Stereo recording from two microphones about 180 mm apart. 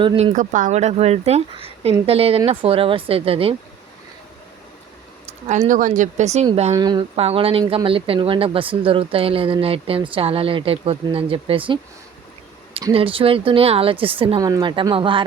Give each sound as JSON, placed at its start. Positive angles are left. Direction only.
{"t": 0.0, "sound": "speech", "side_deg": -25}
{"t": 0.3, "sound": "speech", "side_deg": -45}
{"t": 5.5, "sound": "speech", "side_deg": -45}
{"t": 6.7, "sound": "speech", "side_deg": -25}
{"t": 12.8, "sound": "speech", "side_deg": -30}